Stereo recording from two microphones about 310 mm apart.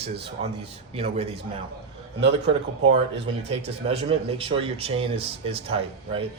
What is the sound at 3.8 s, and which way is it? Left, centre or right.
Speech, centre.